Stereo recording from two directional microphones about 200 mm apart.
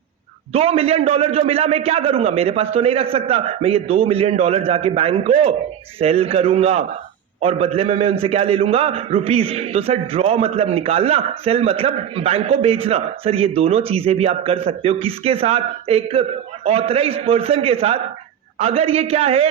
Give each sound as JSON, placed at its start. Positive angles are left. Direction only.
{"t": 0.5, "sound": "a man's voice", "side_deg": -30}